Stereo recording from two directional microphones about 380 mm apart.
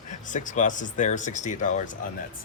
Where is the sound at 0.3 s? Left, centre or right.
Centre.